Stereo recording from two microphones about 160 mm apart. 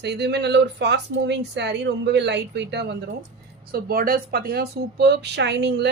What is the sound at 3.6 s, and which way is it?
Speech, 70° right (ahead or behind).